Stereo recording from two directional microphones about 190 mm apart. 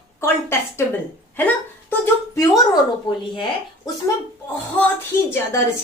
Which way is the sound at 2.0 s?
15° left (ahead or behind).